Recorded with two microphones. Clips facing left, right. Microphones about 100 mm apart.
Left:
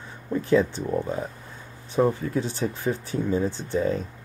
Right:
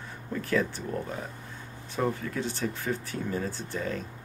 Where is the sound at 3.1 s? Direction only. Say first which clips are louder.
Left 7 dB; 25° left (ahead or behind).